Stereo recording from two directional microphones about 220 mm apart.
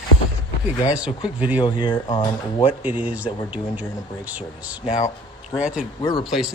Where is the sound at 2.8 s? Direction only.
5° right (ahead or behind).